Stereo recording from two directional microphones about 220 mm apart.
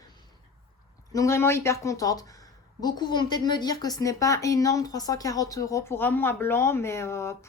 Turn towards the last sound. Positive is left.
turn(degrees=10)  # may be behind; listen again after turning